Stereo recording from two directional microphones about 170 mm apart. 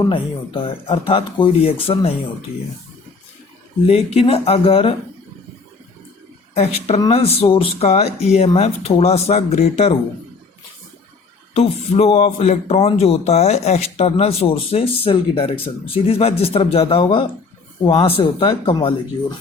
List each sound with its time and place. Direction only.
0.1 s speech: 30° left (ahead or behind)
3.8 s speech: 35° left (ahead or behind)
6.5 s speech: 40° left (ahead or behind)
11.5 s speech: 35° left (ahead or behind)